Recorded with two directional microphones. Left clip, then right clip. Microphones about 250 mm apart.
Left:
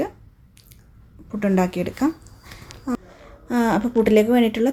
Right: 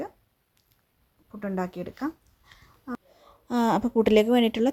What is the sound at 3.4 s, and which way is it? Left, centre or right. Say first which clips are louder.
A woman's voice: left 3 dB; right.